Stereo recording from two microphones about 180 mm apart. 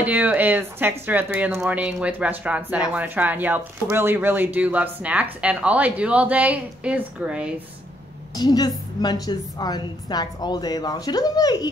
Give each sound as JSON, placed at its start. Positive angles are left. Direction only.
{"t": 0.0, "sound": "speech", "side_deg": -10}
{"t": 8.4, "sound": "a woman's voice", "side_deg": 20}